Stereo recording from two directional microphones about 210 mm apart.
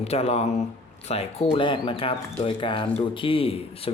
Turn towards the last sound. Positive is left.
turn(degrees=25)  # may be behind; listen again after turning